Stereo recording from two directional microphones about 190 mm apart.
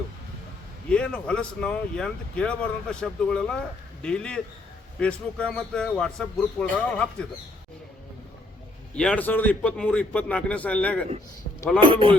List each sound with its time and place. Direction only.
0.9 s speech: 5° left (ahead or behind)
9.0 s a man's voice: 5° left (ahead or behind)
11.8 s speech: 25° right (ahead or behind)